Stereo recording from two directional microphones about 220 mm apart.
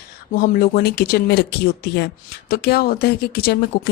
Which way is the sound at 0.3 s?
40° left (ahead or behind).